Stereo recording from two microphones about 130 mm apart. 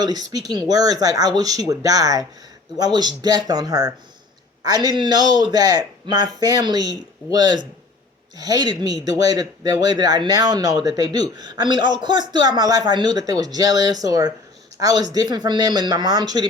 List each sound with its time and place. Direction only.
0.0 s speech: 30° right (ahead or behind)